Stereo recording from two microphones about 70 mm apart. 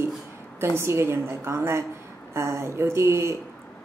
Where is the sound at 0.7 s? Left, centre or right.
Right.